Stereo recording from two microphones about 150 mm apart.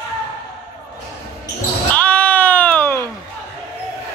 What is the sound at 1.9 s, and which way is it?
Bleat, 10° left (ahead or behind).